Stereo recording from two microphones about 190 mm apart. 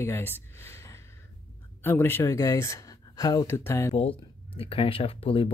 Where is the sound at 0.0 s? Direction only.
15° left (ahead or behind).